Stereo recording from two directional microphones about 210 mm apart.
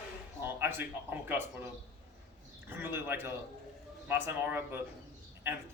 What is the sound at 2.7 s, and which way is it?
Speech, 10° right (ahead or behind).